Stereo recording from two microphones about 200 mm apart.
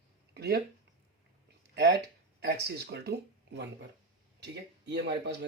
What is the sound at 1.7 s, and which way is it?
Speech, 55° right (ahead or behind).